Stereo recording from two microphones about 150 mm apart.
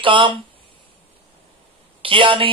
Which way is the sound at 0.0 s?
35° right (ahead or behind).